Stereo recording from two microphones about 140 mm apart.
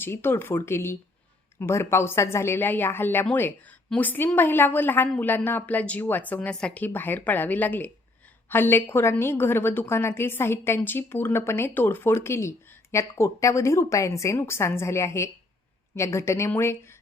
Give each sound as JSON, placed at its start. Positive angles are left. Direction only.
{"t": 0.0, "sound": "a woman's voice", "side_deg": 15}